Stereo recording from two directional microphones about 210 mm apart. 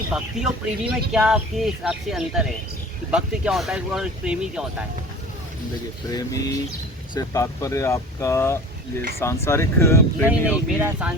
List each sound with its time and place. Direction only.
0.1 s speech: centre (ahead or behind)
6.1 s speech: 15° left (ahead or behind)
10.2 s speech: 10° right (ahead or behind)